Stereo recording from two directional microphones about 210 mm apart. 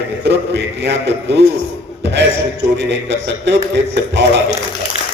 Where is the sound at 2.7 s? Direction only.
55° right (ahead or behind).